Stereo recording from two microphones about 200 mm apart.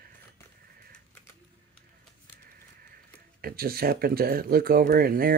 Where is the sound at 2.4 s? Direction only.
50° right (ahead or behind).